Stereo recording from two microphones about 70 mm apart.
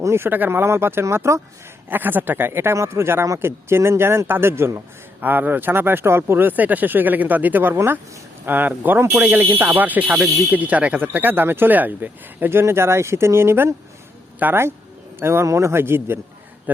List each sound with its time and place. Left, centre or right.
0.0 s speech: right
1.9 s speech: right
5.2 s speech: right
14.3 s speech: right
15.2 s speech: right
16.7 s speech: right